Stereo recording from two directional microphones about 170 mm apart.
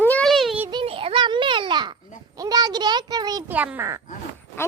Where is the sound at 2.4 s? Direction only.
25° right (ahead or behind).